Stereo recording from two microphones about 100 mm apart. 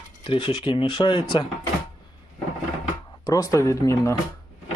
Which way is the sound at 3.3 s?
40° left (ahead or behind).